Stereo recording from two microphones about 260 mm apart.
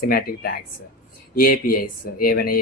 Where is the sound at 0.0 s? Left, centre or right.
Left.